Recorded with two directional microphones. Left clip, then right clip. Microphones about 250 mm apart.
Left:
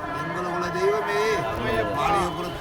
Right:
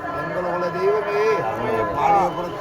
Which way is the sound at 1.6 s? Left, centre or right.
Left.